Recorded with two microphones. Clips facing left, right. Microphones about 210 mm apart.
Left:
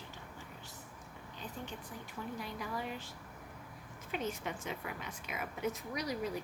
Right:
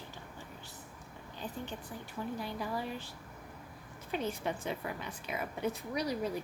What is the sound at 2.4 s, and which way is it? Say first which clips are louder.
A woman's voice: right 3 dB; 30° right (ahead or behind).